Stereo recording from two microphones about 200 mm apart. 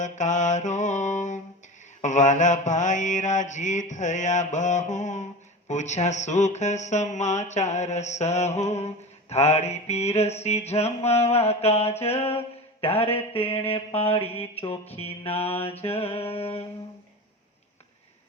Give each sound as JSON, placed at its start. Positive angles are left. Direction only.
{"t": 0.0, "sound": "mantra", "side_deg": 35}